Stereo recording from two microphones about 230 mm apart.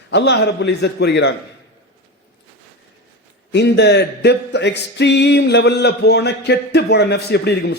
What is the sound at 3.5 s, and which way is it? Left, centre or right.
Speech, left.